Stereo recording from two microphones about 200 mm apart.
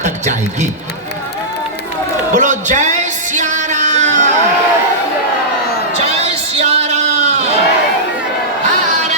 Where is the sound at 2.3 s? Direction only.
40° right (ahead or behind).